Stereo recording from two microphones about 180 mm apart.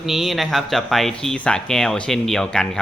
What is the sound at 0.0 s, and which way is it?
Speech, centre (ahead or behind).